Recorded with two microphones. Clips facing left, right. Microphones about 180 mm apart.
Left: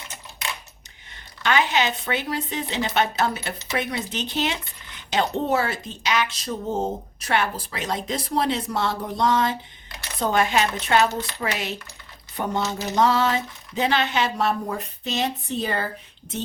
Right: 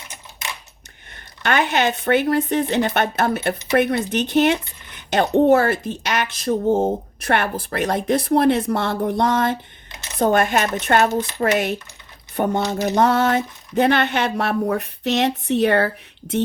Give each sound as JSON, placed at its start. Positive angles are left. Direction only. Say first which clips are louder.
{"t": 1.1, "sound": "speech", "louder": "right 2 dB", "side_deg": -55}